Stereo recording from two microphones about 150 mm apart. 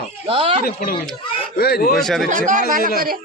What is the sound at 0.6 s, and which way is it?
Speech, 75° left (ahead or behind).